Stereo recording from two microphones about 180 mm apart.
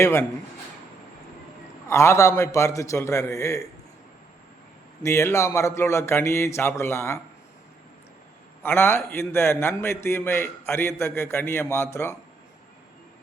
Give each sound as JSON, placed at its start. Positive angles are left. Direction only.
{"t": 0.0, "sound": "a man's voice", "side_deg": 15}
{"t": 1.9, "sound": "a man's voice", "side_deg": 15}
{"t": 5.0, "sound": "a man's voice", "side_deg": 15}
{"t": 8.6, "sound": "a man's voice", "side_deg": 10}